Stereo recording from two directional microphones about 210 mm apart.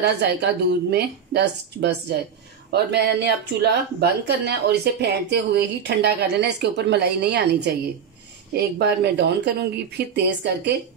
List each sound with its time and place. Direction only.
0.0 s speech: 55° right (ahead or behind)